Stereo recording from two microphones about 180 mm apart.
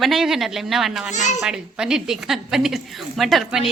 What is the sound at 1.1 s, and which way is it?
Speech, 40° left (ahead or behind).